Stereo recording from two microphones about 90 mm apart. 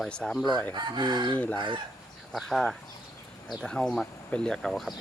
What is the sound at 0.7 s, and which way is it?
Chicken, 55° right (ahead or behind).